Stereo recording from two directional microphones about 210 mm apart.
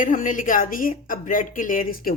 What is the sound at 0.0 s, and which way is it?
A woman's voice, 40° left (ahead or behind).